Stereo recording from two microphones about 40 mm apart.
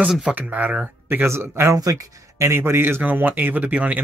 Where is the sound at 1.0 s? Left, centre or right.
Right.